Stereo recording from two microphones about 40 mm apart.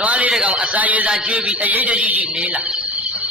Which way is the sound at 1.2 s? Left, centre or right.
Right.